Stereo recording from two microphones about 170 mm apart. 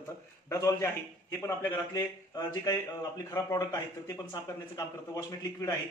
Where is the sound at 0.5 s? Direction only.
15° left (ahead or behind).